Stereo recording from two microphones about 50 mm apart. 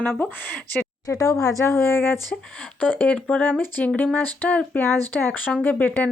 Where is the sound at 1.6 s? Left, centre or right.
Left.